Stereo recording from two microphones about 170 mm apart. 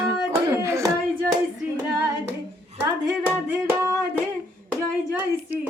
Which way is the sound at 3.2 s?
10° right (ahead or behind).